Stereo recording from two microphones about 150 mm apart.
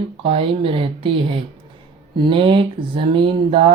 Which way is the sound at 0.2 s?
40° right (ahead or behind).